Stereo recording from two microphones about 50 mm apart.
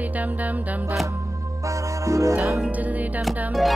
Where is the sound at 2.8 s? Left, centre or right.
Right.